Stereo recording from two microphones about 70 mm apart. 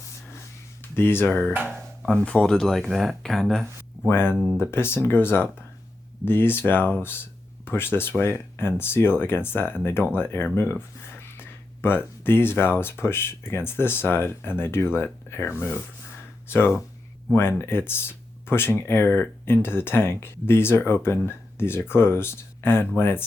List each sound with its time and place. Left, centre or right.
0.9 s speech: left
1.6 s music: centre
2.2 s speech: centre
4.1 s speech: left